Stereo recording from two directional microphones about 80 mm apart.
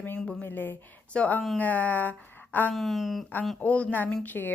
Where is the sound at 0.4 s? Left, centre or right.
Left.